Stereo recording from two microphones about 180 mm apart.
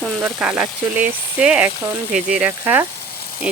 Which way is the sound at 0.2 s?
10° right (ahead or behind).